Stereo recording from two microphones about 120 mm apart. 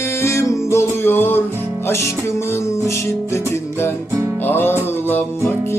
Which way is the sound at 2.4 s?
20° left (ahead or behind).